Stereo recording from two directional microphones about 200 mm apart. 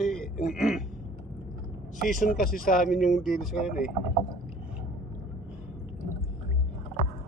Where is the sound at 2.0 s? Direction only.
40° left (ahead or behind).